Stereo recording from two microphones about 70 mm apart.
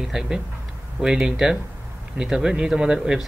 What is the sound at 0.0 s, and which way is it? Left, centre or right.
Speech, centre.